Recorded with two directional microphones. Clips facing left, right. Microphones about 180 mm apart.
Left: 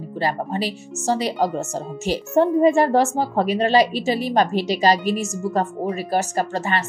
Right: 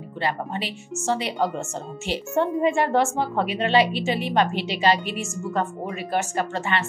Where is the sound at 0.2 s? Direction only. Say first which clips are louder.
Left 4 dB; 40° left (ahead or behind).